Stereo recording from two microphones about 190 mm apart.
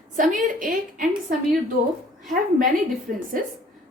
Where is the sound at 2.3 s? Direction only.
45° right (ahead or behind).